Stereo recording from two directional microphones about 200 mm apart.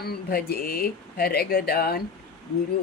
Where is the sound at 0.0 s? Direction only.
50° left (ahead or behind).